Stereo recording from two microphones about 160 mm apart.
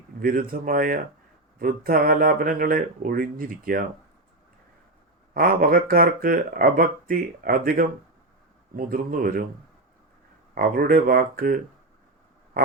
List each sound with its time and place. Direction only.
0.2 s speech: 65° right (ahead or behind)
5.3 s speech: 60° right (ahead or behind)
10.5 s speech: 65° right (ahead or behind)
12.6 s a sound: 65° right (ahead or behind)